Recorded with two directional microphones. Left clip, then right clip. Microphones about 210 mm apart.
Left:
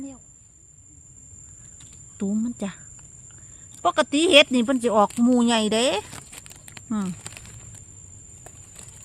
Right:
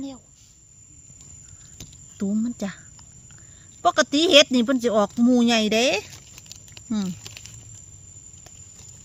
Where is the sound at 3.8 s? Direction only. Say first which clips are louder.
Right 1 dB; 5° left (ahead or behind).